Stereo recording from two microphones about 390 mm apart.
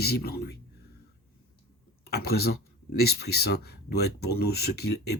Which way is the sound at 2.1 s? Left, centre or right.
Left.